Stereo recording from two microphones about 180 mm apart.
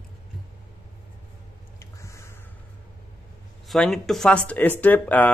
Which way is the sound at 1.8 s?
15° left (ahead or behind).